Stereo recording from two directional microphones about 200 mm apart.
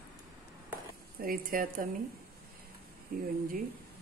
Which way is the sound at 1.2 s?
45° right (ahead or behind).